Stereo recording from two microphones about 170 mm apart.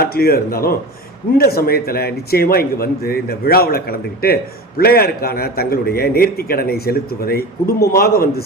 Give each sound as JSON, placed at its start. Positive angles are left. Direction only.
{"t": 0.0, "sound": "a man's voice", "side_deg": 60}